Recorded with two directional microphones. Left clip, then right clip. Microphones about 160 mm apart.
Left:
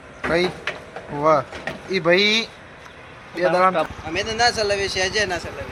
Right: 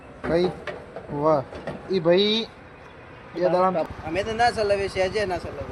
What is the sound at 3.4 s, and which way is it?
Speech, 10° left (ahead or behind).